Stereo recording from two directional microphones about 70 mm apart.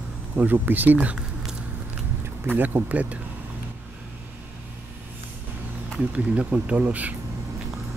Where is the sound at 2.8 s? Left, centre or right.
Right.